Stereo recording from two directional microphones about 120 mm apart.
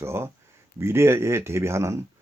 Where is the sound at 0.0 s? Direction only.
20° right (ahead or behind).